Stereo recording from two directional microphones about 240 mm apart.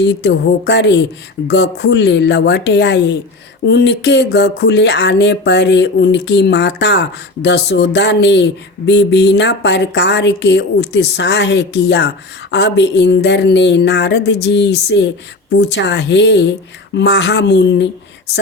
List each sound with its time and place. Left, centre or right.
0.0 s a woman's voice: left